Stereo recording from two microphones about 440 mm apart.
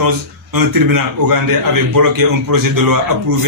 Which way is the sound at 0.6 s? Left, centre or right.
Right.